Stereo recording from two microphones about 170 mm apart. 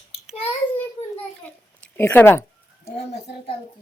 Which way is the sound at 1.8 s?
10° left (ahead or behind).